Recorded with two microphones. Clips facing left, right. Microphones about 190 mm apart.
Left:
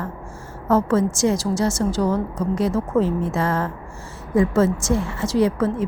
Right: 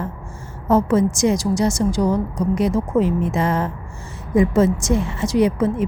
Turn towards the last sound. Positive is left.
turn(degrees=-15)  # may be behind; listen again after turning